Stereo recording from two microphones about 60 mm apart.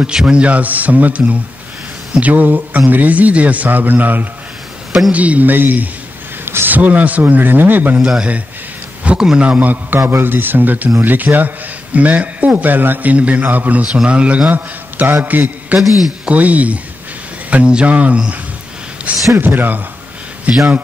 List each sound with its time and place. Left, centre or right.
0.0 s a man's voice: centre; by 8.0 s right
9.0 s a man's voice: centre
9.5 s a man's voice: right
14.5 s a man's voice: right
19.3 s a man's voice: right